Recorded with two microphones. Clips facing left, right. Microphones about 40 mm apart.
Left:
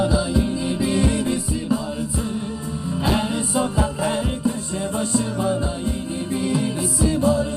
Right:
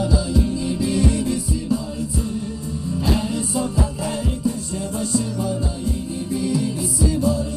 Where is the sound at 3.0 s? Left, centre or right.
Left.